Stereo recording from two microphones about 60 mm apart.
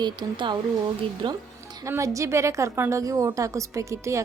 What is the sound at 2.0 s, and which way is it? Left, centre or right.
A woman's voice, right.